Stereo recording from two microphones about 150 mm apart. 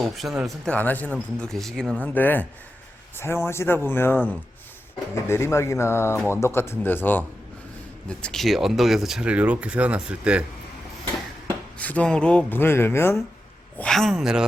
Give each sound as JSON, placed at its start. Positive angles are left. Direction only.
{"t": 0.0, "sound": "speech", "side_deg": 0}
{"t": 8.2, "sound": "speech", "side_deg": 0}
{"t": 11.8, "sound": "speech", "side_deg": 10}
{"t": 13.7, "sound": "speech", "side_deg": 5}